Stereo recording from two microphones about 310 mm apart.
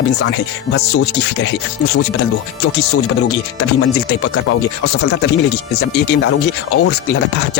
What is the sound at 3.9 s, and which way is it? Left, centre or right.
Speech, left.